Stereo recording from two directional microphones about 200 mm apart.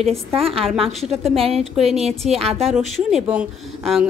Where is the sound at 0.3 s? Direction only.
30° right (ahead or behind).